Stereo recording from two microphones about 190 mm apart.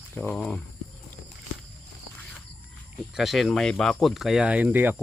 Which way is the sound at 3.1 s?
Centre (ahead or behind).